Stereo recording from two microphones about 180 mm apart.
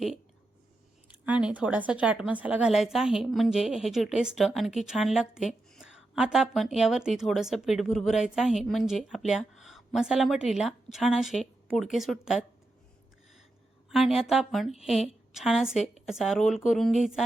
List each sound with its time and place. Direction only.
1.2 s a woman's voice: 5° right (ahead or behind)
13.9 s a woman's voice: centre (ahead or behind)